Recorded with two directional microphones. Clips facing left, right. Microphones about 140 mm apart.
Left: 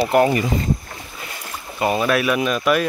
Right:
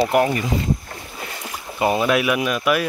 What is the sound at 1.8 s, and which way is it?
Speech, 15° right (ahead or behind).